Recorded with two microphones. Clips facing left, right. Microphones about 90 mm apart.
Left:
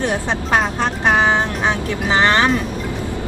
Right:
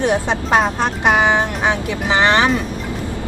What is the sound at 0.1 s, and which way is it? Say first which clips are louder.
Speech: right 2 dB; 20° right (ahead or behind).